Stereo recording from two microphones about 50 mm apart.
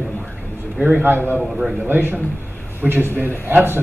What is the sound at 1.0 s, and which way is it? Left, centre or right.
Speech, right.